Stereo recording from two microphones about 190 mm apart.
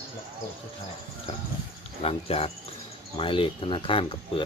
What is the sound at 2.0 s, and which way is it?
Speech, 30° left (ahead or behind).